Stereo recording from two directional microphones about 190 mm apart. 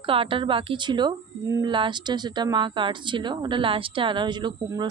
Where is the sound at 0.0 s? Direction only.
30° right (ahead or behind).